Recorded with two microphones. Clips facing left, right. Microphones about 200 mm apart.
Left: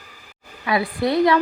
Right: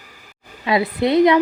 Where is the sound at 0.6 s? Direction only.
20° right (ahead or behind).